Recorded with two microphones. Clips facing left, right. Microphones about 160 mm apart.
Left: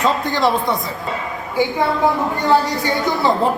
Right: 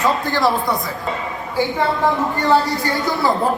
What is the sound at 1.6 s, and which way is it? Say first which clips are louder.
Speech: left 2 dB; 15° left (ahead or behind).